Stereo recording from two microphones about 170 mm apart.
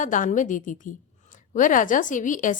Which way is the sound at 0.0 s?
50° left (ahead or behind).